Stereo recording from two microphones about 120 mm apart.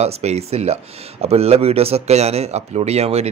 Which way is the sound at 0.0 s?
65° right (ahead or behind).